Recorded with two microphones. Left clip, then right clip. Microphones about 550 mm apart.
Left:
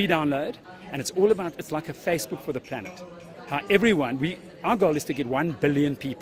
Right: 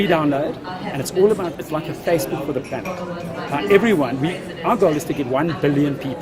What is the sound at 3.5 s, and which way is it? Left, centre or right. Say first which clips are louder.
A man's voice: right 6 dB; left.